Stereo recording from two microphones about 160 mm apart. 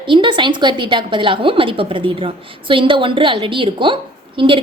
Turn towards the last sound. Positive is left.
turn(degrees=-35)  # may be behind; listen again after turning